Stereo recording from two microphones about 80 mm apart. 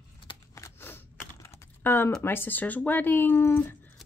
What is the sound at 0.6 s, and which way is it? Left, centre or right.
Typewriter, left.